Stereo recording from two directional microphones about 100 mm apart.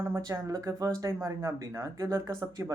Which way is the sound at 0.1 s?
35° right (ahead or behind).